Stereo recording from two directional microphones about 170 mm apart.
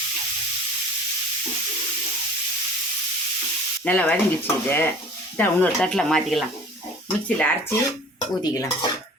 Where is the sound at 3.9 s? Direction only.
10° left (ahead or behind).